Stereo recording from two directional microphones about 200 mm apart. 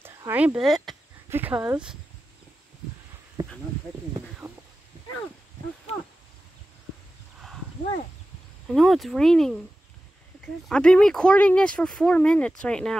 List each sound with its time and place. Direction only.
0.0 s speech: 10° right (ahead or behind)
3.4 s a sound: 20° right (ahead or behind)
8.6 s speech: centre (ahead or behind)
10.7 s speech: 5° left (ahead or behind)